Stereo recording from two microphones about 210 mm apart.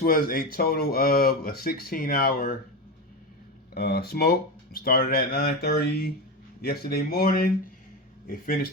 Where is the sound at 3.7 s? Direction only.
50° left (ahead or behind).